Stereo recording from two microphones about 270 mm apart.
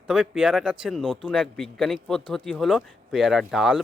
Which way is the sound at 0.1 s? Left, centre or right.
Centre.